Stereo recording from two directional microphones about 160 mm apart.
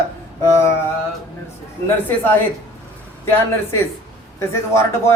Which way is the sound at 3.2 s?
15° left (ahead or behind).